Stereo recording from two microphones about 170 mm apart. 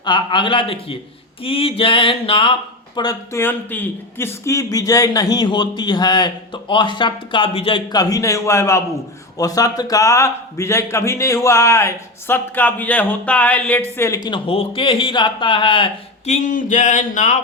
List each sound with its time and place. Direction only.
0.0 s a man's voice: 25° left (ahead or behind); by 17.3 s 45° left (ahead or behind)